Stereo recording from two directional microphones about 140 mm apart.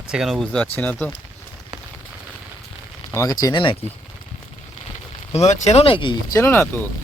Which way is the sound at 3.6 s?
40° left (ahead or behind).